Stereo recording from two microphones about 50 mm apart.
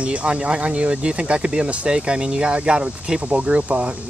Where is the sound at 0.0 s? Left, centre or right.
Right.